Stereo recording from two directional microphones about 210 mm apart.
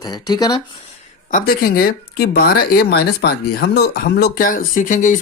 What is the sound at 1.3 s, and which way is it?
Speech, 40° left (ahead or behind).